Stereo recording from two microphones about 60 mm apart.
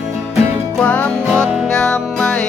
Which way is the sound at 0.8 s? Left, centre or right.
Centre.